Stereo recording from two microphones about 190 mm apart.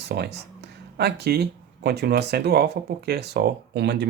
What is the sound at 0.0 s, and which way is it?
Speech, 60° right (ahead or behind).